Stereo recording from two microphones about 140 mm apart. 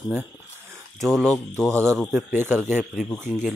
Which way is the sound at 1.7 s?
20° right (ahead or behind).